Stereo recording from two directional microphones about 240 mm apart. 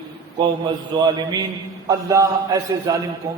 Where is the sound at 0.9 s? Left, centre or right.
Centre.